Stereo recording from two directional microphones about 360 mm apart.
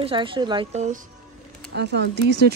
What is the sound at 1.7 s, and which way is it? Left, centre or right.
Speech, right.